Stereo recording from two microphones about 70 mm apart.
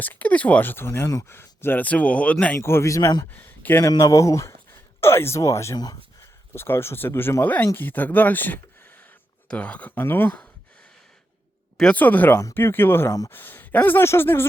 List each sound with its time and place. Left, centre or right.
0.0 s speech: left
1.8 s speech: centre
2.6 s speech: left
3.3 s speech: left
3.8 s speech: left
5.7 s speech: left
6.5 s speech: left; by 10.0 s centre
10.0 s speech: left
11.9 s speech: left